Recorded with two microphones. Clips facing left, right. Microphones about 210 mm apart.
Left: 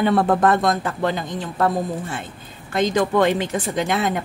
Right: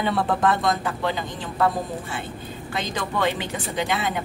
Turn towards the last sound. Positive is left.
turn(degrees=45)  # may be behind; listen again after turning